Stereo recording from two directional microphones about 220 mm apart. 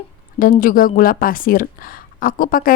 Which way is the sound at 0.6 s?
40° left (ahead or behind).